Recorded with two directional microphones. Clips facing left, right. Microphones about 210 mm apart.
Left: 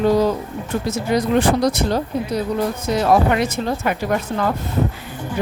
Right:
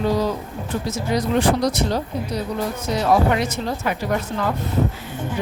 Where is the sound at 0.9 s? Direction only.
55° left (ahead or behind).